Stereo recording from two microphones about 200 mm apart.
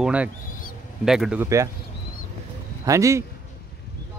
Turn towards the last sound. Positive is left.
turn(degrees=-15)  # may be behind; listen again after turning